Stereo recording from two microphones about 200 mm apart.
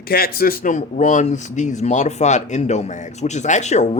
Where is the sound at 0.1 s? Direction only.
50° left (ahead or behind).